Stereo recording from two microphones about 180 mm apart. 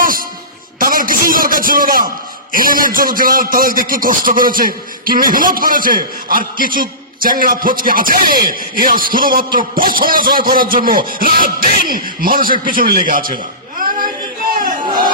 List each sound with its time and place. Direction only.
0.7 s music: 50° right (ahead or behind)
2.5 s a man's voice: 50° right (ahead or behind)